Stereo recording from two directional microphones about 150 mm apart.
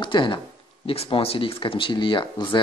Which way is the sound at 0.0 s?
30° left (ahead or behind).